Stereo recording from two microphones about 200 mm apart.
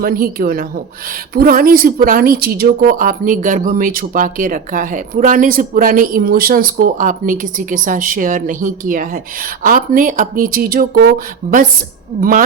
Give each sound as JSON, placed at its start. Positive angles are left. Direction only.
{"t": 0.0, "sound": "a woman's voice", "side_deg": -50}
{"t": 12.2, "sound": "a woman's voice", "side_deg": -45}